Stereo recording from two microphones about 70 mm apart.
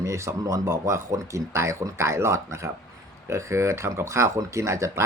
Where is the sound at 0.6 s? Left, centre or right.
Right.